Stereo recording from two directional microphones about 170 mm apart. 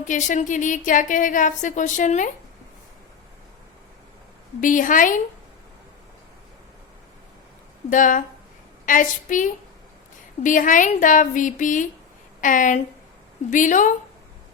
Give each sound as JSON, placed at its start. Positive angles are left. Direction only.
{"t": 0.0, "sound": "a woman's voice", "side_deg": 45}
{"t": 4.6, "sound": "a woman's voice", "side_deg": 50}
{"t": 7.9, "sound": "a woman's voice", "side_deg": 50}